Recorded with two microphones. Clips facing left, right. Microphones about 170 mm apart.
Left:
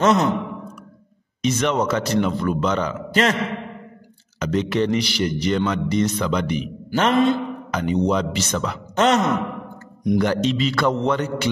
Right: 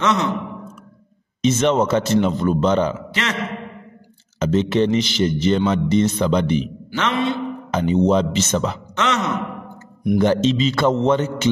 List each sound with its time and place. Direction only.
0.0 s a man's voice: 40° left (ahead or behind)
1.4 s a man's voice: 25° right (ahead or behind)
3.1 s a man's voice: 45° left (ahead or behind)
4.4 s a man's voice: 25° right (ahead or behind)
6.9 s a man's voice: 45° left (ahead or behind)
7.7 s a man's voice: 25° right (ahead or behind)
8.9 s a man's voice: 40° left (ahead or behind)
10.1 s a man's voice: 25° right (ahead or behind)